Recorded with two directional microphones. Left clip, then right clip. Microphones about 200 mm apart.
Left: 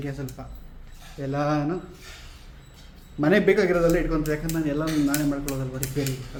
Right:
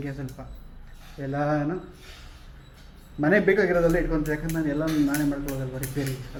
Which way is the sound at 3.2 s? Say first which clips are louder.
Left 1 dB; 10° left (ahead or behind).